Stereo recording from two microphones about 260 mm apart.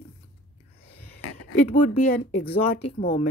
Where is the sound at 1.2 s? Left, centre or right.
Left.